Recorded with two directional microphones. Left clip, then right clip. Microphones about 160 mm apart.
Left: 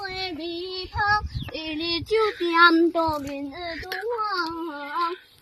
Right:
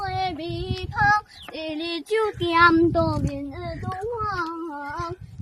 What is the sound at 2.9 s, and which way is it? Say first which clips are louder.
Speech: right 1 dB; 85° right.